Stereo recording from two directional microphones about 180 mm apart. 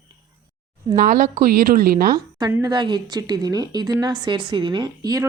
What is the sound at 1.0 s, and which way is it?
A woman's voice, 50° right (ahead or behind).